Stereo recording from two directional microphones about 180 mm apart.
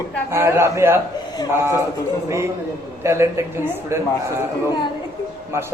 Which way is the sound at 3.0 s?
15° right (ahead or behind).